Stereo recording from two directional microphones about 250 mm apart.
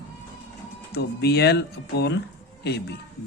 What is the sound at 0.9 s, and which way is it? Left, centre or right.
Speech, left.